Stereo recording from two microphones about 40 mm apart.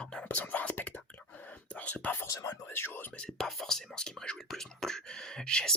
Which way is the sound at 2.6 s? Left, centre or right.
Left.